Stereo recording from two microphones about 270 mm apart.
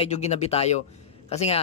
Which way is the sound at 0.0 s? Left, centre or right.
Left.